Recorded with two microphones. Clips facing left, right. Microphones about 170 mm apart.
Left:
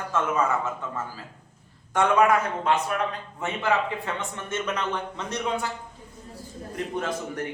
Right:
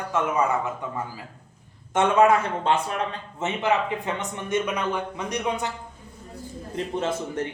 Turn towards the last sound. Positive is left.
turn(degrees=-25)  # may be behind; listen again after turning